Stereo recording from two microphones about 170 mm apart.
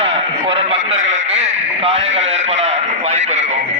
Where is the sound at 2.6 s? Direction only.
40° right (ahead or behind).